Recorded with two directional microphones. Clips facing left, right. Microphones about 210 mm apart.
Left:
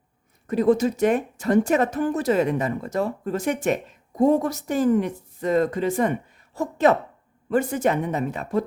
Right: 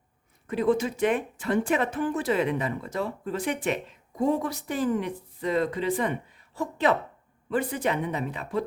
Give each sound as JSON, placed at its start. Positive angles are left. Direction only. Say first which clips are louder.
{"t": 0.4, "sound": "speech", "louder": "left 5 dB", "side_deg": 40}